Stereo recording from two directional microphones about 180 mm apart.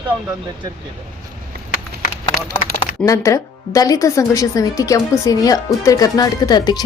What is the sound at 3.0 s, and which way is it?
Speech, 15° left (ahead or behind).